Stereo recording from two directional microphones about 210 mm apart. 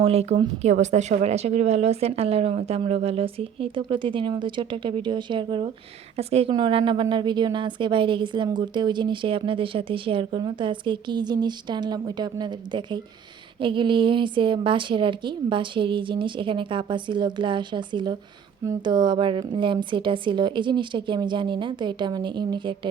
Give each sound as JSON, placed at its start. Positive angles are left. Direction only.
{"t": 0.0, "sound": "a woman's voice", "side_deg": -30}